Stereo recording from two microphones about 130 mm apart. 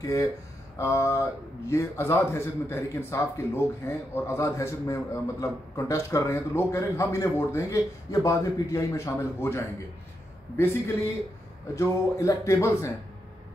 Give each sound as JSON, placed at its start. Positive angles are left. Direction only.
{"t": 0.0, "sound": "a man's voice", "side_deg": 25}
{"t": 11.7, "sound": "a man's voice", "side_deg": 25}